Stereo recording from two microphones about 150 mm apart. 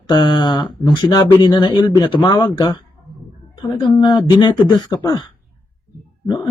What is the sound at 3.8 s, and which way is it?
Speech, 25° left (ahead or behind).